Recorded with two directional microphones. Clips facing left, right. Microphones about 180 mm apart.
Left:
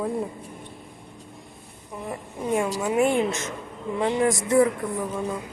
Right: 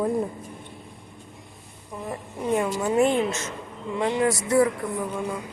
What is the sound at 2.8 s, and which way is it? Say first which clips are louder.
A woman's voice: right 1 dB; 10° left (ahead or behind).